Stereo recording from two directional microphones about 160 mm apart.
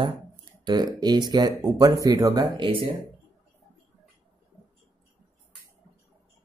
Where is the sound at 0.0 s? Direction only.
30° right (ahead or behind).